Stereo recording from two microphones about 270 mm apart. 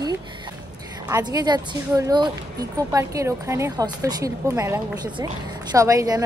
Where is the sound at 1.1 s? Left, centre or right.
Centre.